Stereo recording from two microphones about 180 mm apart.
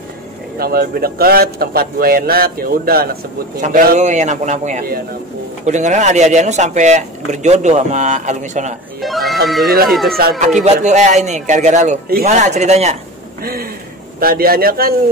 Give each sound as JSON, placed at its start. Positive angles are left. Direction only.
{"t": 0.6, "sound": "a man's voice", "side_deg": -55}
{"t": 3.6, "sound": "speech", "side_deg": -45}
{"t": 9.0, "sound": "speech", "side_deg": 0}
{"t": 10.0, "sound": "a man's voice", "side_deg": -55}
{"t": 10.4, "sound": "speech", "side_deg": -40}
{"t": 13.4, "sound": "a man's voice", "side_deg": -55}